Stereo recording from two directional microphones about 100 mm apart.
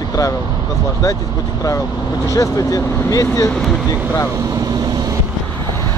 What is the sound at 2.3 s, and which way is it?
Speech, 35° left (ahead or behind).